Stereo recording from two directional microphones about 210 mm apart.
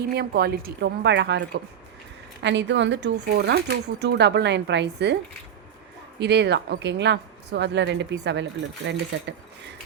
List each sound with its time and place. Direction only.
0.2 s speech: 50° right (ahead or behind)
6.1 s speech: 55° right (ahead or behind)